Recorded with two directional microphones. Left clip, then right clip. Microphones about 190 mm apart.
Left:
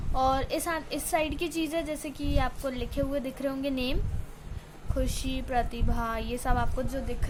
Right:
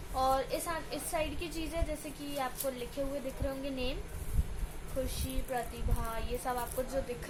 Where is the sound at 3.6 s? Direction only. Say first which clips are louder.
Left 6 dB; 55° left (ahead or behind).